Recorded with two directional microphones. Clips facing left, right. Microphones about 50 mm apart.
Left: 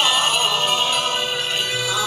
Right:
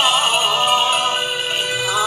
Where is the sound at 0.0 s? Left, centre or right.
Right.